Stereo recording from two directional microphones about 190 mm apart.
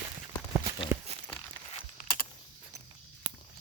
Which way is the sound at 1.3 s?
30° left (ahead or behind).